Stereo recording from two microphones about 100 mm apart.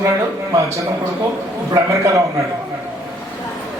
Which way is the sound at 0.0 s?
30° right (ahead or behind).